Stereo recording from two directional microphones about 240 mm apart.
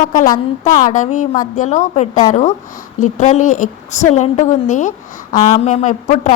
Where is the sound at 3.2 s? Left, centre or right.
Left.